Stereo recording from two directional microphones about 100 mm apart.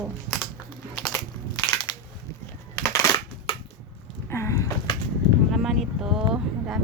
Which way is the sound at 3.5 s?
65° left (ahead or behind).